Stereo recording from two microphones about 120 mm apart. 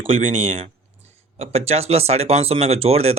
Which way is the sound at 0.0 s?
55° right (ahead or behind).